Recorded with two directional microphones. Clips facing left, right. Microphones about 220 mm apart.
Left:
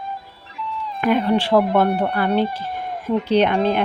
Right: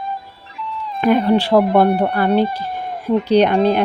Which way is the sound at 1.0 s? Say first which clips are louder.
Right 4 dB; 40° right (ahead or behind).